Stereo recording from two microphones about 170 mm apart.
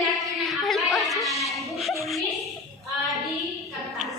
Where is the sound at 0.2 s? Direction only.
Centre (ahead or behind).